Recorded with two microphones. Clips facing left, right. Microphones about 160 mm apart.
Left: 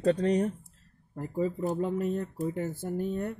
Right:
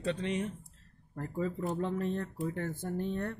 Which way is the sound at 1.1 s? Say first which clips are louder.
Left 4 dB; 15° left (ahead or behind).